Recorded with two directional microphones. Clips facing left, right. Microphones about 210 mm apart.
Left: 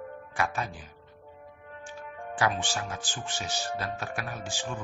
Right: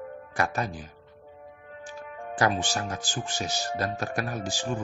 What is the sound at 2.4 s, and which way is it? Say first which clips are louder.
Speech: right 3 dB; 40° right (ahead or behind).